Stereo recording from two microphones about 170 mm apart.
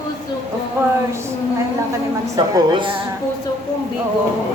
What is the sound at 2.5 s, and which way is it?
Speech, 30° right (ahead or behind).